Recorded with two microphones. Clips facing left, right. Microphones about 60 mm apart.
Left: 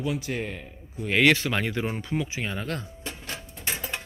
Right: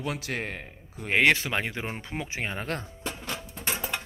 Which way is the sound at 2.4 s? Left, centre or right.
Right.